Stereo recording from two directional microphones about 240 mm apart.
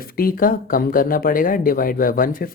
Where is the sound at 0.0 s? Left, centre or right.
Left.